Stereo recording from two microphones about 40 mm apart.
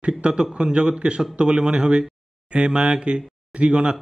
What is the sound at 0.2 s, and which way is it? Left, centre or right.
A man's voice, right.